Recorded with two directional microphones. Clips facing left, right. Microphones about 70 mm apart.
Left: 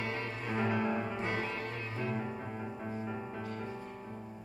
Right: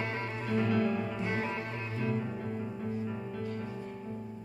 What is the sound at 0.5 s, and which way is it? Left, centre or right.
Music, left.